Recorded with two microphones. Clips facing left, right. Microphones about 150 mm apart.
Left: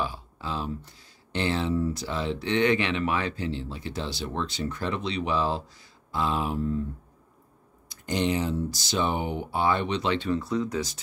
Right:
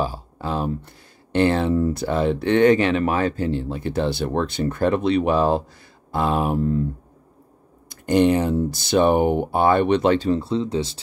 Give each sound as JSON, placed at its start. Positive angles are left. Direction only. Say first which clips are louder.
{"t": 0.0, "sound": "speech", "louder": "right 6 dB", "side_deg": -45}
{"t": 7.9, "sound": "speech", "louder": "right 10 dB", "side_deg": -55}
{"t": 10.1, "sound": "speech", "louder": "right 6 dB", "side_deg": -35}